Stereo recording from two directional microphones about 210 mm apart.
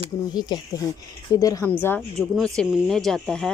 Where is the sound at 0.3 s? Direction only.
20° left (ahead or behind).